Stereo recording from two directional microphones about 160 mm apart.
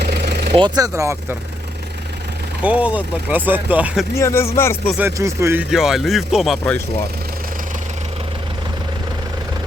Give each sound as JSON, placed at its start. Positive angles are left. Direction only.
{"t": 0.0, "sound": "a sound", "side_deg": -90}
{"t": 0.5, "sound": "speech", "side_deg": -25}
{"t": 2.6, "sound": "speech", "side_deg": -10}
{"t": 4.1, "sound": "speech", "side_deg": 15}
{"t": 4.9, "sound": "speech", "side_deg": -15}
{"t": 5.7, "sound": "speech", "side_deg": 0}